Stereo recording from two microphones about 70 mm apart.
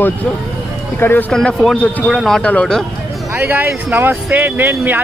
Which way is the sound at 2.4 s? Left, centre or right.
Centre.